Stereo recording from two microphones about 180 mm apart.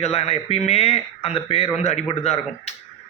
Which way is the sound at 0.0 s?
35° left (ahead or behind).